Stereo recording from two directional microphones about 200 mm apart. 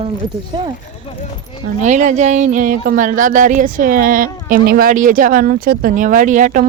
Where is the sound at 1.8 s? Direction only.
35° right (ahead or behind).